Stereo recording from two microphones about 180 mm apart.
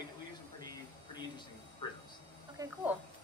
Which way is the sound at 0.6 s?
20° left (ahead or behind).